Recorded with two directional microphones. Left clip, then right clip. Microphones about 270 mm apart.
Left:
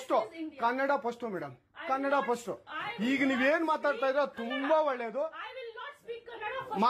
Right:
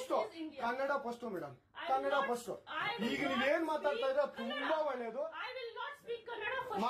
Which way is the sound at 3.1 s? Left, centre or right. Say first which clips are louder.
Left 7 dB; left.